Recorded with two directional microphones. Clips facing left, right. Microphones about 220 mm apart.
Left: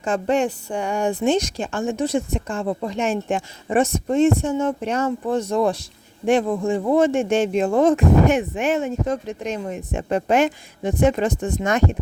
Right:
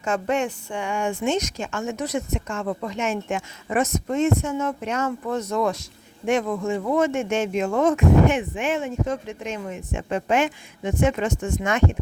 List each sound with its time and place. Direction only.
0.0 s speech: 35° left (ahead or behind)